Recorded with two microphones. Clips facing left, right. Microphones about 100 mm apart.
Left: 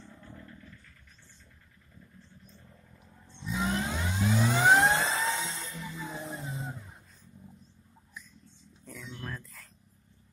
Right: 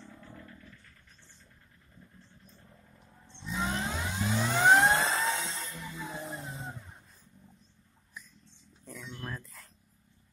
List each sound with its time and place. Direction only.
0.3 s dog: centre (ahead or behind)
3.3 s vehicle: centre (ahead or behind)
5.6 s music: centre (ahead or behind)
9.1 s a sound: 5° right (ahead or behind)